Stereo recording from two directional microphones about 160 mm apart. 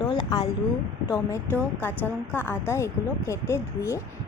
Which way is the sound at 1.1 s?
15° left (ahead or behind).